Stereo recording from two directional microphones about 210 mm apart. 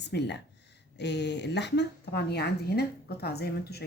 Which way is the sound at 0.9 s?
55° left (ahead or behind).